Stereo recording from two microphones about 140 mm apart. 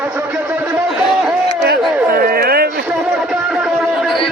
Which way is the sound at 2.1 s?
90° right.